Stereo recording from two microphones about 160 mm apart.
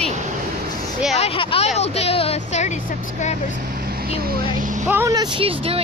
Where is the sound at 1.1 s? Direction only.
40° left (ahead or behind).